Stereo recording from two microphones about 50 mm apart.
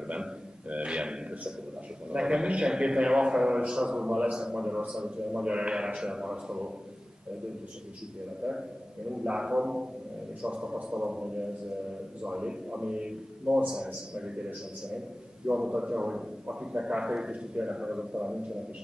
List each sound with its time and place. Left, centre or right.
0.0 s a sound: right
2.0 s a man's voice: centre
8.4 s a man's voice: centre